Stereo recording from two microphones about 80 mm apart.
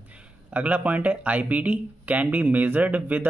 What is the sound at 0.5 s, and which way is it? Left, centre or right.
Speech, centre.